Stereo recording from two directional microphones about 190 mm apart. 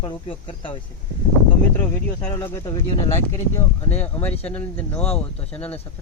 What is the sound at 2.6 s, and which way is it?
Speech, 20° left (ahead or behind).